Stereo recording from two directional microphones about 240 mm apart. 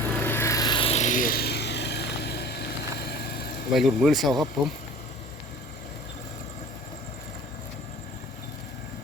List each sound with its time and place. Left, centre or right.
0.1 s vehicle: centre; by 3.5 s left
3.7 s speech: centre